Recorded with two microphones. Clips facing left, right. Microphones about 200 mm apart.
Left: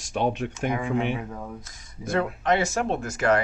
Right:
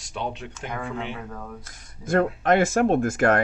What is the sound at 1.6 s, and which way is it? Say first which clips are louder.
Speech: even; 50° right (ahead or behind).